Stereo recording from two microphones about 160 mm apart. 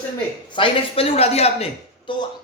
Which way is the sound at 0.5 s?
35° left (ahead or behind).